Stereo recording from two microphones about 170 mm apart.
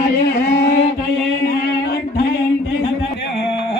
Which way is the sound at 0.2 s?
70° left (ahead or behind).